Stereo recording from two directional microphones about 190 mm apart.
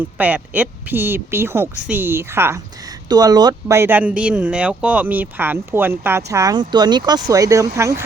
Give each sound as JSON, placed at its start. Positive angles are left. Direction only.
{"t": 0.2, "sound": "speech", "side_deg": -10}